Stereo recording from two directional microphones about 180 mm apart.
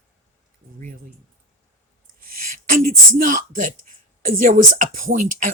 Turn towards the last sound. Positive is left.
turn(degrees=-50)  # may be behind; listen again after turning